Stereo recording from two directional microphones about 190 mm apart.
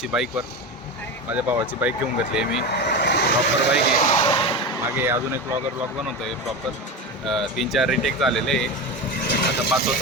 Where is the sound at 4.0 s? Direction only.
35° left (ahead or behind).